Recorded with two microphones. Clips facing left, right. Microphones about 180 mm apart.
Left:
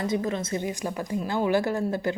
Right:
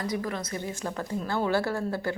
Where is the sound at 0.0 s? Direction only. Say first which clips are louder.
Left 4 dB; 20° left (ahead or behind).